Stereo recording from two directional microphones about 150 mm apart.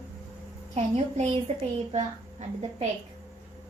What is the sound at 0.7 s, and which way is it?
A woman's voice, 45° right (ahead or behind).